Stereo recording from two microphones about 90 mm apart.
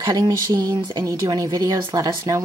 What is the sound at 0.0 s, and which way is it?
Speech, 45° right (ahead or behind).